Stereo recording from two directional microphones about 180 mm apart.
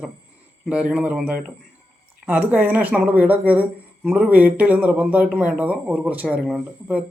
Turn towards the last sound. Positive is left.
turn(degrees=-5)  # may be behind; listen again after turning